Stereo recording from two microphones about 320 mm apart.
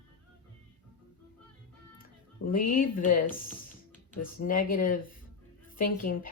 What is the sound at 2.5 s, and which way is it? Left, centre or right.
A woman's voice, left.